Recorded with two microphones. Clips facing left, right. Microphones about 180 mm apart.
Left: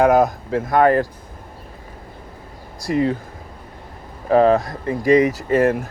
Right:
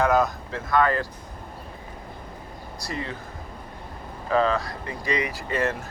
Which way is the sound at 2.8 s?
45° left (ahead or behind).